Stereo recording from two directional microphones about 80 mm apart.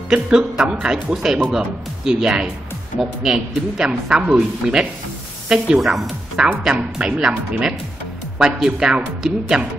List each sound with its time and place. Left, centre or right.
0.1 s speech: centre
8.4 s speech: centre